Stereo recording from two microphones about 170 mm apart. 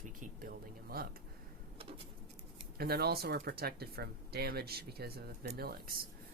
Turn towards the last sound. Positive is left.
turn(degrees=-65)  # may be behind; listen again after turning